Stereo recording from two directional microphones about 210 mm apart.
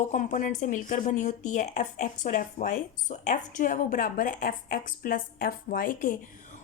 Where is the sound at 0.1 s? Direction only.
35° left (ahead or behind).